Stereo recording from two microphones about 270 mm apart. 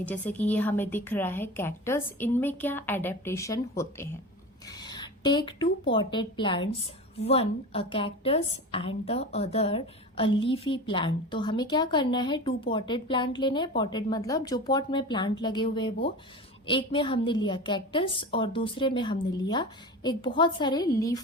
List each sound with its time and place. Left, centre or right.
0.0 s a woman's voice: centre